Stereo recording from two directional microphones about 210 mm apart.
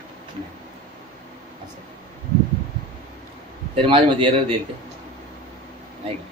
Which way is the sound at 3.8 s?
25° right (ahead or behind).